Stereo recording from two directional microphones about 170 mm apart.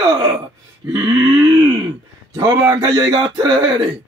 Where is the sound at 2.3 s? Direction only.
20° right (ahead or behind).